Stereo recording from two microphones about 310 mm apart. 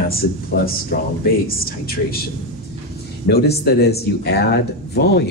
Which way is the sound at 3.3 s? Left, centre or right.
Left.